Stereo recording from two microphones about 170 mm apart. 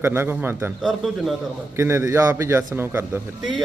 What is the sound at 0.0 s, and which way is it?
Speech, 10° right (ahead or behind).